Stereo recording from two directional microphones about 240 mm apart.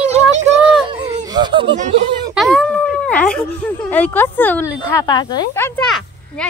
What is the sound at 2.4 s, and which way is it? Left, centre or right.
Speech, centre.